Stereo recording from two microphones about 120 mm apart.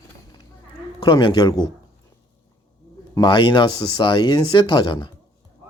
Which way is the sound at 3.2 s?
40° left (ahead or behind).